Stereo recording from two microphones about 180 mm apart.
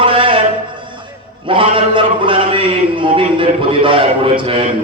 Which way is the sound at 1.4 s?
30° right (ahead or behind).